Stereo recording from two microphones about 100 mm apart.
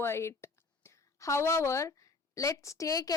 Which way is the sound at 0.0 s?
25° left (ahead or behind).